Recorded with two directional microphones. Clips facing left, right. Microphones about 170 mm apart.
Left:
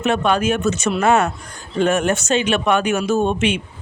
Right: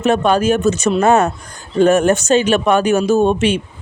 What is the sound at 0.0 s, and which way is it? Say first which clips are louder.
Speech: right 4 dB; 40° right (ahead or behind).